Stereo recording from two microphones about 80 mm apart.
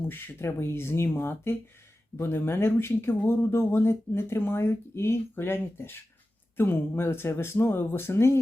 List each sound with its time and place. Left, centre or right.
0.1 s speech: left